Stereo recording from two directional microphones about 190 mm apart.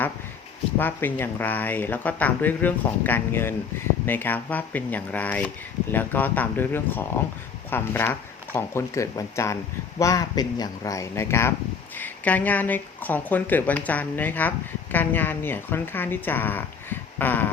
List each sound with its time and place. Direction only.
0.8 s speech: 10° left (ahead or behind)